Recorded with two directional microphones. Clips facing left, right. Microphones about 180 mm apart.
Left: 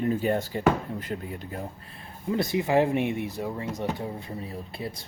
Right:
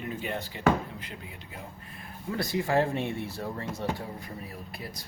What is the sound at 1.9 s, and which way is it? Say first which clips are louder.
Speech: left 5 dB; 25° left (ahead or behind).